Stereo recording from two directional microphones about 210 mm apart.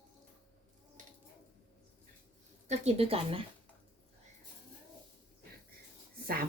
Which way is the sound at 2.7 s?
30° right (ahead or behind).